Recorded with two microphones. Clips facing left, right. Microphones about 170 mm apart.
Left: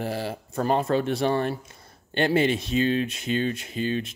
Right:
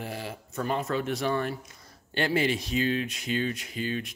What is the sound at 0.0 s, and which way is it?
Speech, 35° left (ahead or behind).